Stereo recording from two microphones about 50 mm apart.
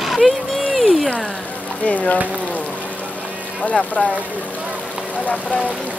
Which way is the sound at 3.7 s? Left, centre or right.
Left.